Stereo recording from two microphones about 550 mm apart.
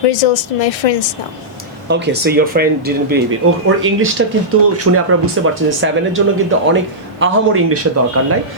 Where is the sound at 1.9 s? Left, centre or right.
Centre.